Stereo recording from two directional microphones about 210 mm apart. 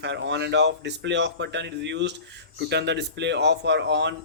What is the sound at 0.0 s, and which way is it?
Speech, 55° right (ahead or behind).